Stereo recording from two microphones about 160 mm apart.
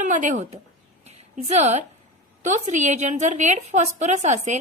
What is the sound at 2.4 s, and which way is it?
A woman's voice, 50° right (ahead or behind).